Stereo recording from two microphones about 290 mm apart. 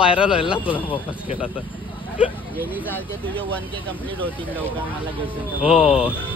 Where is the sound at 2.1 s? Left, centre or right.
Centre.